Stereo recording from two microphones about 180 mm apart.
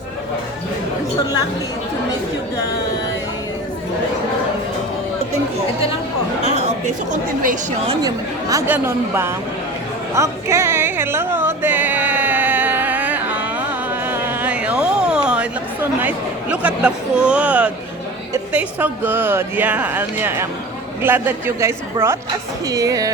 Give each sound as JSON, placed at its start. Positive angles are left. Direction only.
{"t": 6.6, "sound": "a woman's voice", "side_deg": -45}
{"t": 8.0, "sound": "speech", "side_deg": -20}
{"t": 10.2, "sound": "music", "side_deg": -15}
{"t": 14.1, "sound": "chatter", "side_deg": -10}
{"t": 18.5, "sound": "speech", "side_deg": -10}